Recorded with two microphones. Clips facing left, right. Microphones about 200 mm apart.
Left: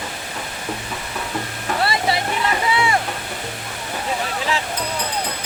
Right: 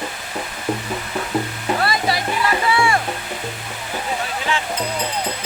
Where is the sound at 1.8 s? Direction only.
25° left (ahead or behind).